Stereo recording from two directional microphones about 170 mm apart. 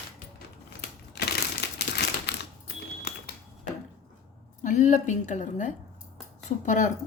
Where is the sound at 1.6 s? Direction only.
75° left (ahead or behind).